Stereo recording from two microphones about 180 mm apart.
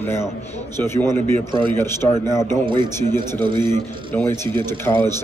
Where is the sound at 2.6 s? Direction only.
25° right (ahead or behind).